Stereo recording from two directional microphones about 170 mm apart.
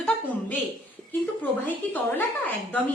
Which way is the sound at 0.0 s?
10° left (ahead or behind).